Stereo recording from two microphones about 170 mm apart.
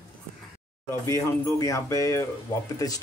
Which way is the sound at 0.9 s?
20° left (ahead or behind).